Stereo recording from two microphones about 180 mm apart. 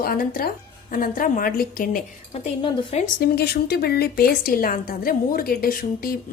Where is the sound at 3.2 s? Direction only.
60° left (ahead or behind).